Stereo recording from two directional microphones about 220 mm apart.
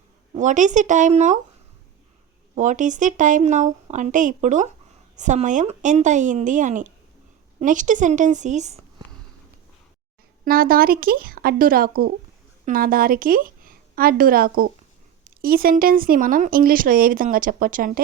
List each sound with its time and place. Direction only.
0.3 s speech: 35° right (ahead or behind)
2.6 s speech: 35° right (ahead or behind)
10.4 s a woman's voice: 40° right (ahead or behind)